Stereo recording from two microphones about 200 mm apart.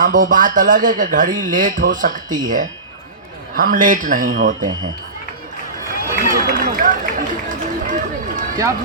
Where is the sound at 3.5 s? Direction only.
45° right (ahead or behind).